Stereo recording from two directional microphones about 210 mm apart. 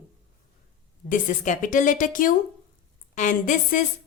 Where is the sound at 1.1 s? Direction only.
35° left (ahead or behind).